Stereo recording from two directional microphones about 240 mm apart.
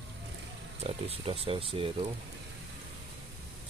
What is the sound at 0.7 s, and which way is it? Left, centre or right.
Speech, right.